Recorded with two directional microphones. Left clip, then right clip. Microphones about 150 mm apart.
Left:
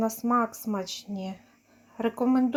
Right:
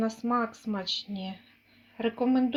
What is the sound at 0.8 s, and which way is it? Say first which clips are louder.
Speech: right 6 dB; 80° left.